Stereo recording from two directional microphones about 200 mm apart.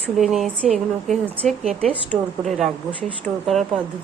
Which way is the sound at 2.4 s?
Centre (ahead or behind).